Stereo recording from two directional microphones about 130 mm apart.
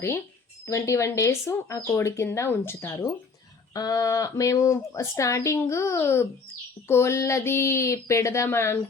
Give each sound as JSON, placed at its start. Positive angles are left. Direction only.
{"t": 0.7, "sound": "speech", "side_deg": 20}